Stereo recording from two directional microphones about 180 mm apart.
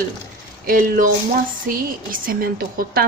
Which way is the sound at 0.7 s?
50° right (ahead or behind).